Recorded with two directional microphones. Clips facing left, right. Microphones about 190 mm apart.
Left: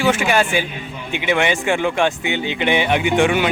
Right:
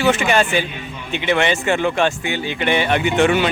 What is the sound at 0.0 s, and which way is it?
Speech, 10° left (ahead or behind).